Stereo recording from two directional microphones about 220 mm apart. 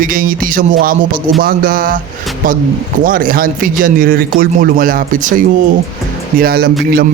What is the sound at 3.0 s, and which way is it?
Speech, 40° right (ahead or behind).